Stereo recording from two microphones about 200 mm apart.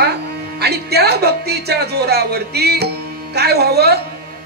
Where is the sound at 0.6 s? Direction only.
55° right (ahead or behind).